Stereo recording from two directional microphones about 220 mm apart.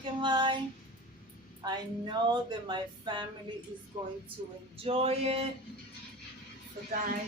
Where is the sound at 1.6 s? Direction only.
20° right (ahead or behind).